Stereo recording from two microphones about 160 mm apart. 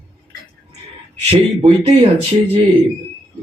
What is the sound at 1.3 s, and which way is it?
Speech, 35° right (ahead or behind).